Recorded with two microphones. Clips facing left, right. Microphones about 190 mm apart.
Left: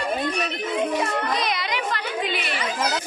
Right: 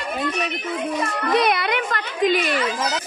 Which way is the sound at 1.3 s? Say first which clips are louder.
Right 6 dB; 60° right (ahead or behind).